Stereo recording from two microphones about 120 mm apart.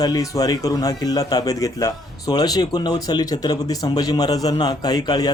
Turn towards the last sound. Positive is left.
turn(degrees=35)  # may be behind; listen again after turning